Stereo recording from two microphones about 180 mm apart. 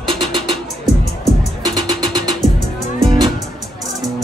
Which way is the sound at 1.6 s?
25° right (ahead or behind).